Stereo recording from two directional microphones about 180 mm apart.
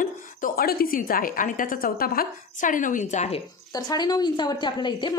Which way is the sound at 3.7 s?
20° left (ahead or behind).